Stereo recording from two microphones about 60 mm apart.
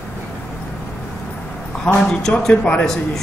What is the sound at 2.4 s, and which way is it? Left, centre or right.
Speech, centre.